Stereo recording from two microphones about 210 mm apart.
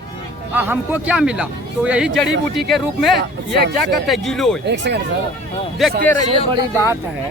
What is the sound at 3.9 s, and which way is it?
Speech, centre (ahead or behind).